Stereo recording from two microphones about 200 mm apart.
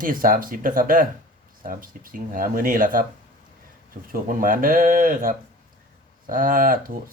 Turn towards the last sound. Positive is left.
turn(degrees=-45)  # may be behind; listen again after turning